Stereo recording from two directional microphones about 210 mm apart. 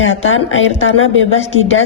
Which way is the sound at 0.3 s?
70° left (ahead or behind).